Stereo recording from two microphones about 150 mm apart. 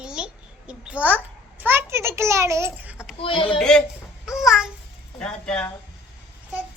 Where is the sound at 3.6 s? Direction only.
5° left (ahead or behind).